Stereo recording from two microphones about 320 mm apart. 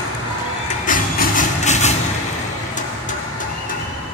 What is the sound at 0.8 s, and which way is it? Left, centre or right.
Music, left.